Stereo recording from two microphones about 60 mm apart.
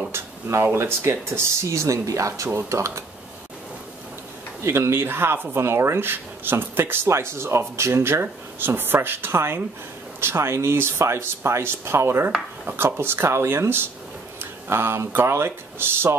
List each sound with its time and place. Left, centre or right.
0.1 s a sound: right
0.7 s speech: right
4.6 s speech: right